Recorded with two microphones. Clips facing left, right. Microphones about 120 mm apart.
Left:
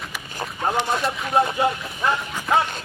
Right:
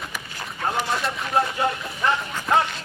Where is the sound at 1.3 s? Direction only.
15° left (ahead or behind).